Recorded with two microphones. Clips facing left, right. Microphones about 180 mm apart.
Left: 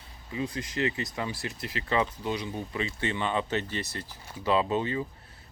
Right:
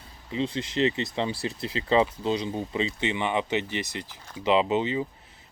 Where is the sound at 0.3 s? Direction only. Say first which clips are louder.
Right 4 dB; 25° right (ahead or behind).